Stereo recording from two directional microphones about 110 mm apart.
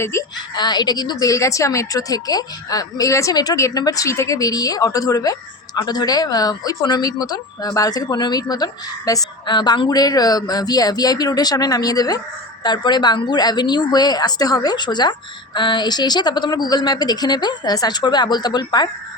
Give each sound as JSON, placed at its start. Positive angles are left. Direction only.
{"t": 0.0, "sound": "a woman's voice", "side_deg": 25}
{"t": 0.5, "sound": "a woman's voice", "side_deg": 40}